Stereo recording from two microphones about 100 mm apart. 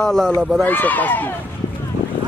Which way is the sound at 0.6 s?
15° left (ahead or behind).